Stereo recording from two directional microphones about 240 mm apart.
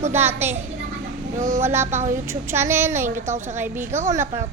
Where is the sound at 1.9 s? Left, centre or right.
Right.